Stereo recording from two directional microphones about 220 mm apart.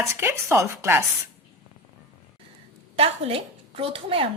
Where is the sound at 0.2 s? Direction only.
10° right (ahead or behind).